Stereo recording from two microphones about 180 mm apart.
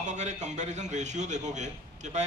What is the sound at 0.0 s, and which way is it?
A man's voice, 40° right (ahead or behind).